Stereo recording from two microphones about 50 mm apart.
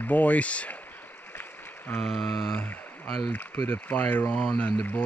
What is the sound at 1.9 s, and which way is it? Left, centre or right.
Mantra, left.